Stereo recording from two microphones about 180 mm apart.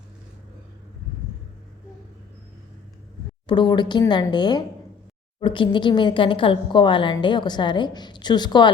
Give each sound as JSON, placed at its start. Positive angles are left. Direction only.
{"t": 3.4, "sound": "a woman's voice", "side_deg": 25}